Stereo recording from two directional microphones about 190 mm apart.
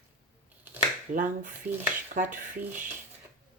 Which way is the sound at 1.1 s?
40° right (ahead or behind).